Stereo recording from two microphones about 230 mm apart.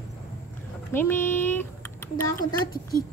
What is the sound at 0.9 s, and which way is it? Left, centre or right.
Speech, centre.